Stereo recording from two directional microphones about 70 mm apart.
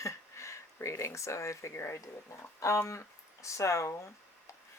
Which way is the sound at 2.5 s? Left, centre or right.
Left.